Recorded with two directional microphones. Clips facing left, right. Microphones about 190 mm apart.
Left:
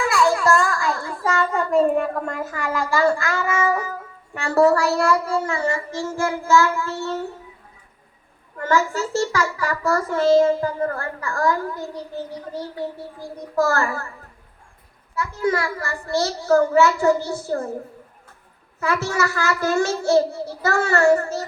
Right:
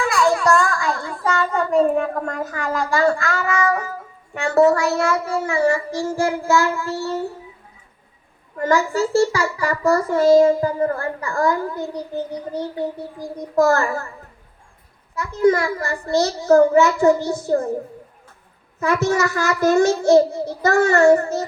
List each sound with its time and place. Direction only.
0.0 s a sound: centre (ahead or behind)
4.6 s a child's voice: centre (ahead or behind)
8.6 s a child's voice: 15° right (ahead or behind)
15.1 s a child's voice: 20° right (ahead or behind)
18.8 s a child's voice: 20° right (ahead or behind)